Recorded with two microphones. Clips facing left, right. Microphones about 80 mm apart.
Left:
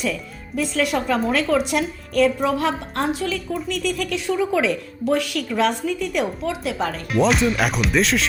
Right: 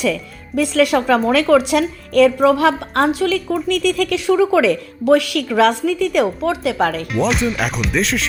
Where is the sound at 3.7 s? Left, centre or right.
Right.